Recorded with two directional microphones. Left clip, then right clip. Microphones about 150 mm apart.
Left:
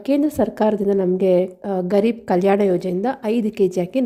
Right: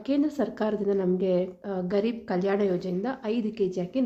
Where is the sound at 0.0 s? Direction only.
45° left (ahead or behind).